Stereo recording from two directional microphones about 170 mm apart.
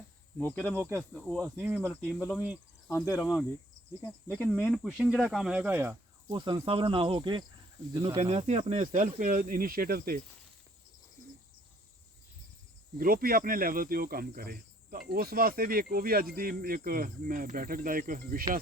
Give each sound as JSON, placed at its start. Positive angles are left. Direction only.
{"t": 0.3, "sound": "cricket", "side_deg": 10}
{"t": 0.8, "sound": "speech", "side_deg": -15}
{"t": 1.1, "sound": "speech", "side_deg": 5}
{"t": 1.5, "sound": "speech", "side_deg": -10}
{"t": 2.1, "sound": "cricket", "side_deg": 10}
{"t": 4.5, "sound": "speech", "side_deg": 0}
{"t": 6.3, "sound": "cricket", "side_deg": -25}
{"t": 8.0, "sound": "speech", "side_deg": -35}
{"t": 13.0, "sound": "speech", "side_deg": -60}